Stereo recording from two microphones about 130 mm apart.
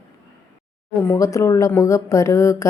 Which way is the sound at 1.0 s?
25° left (ahead or behind).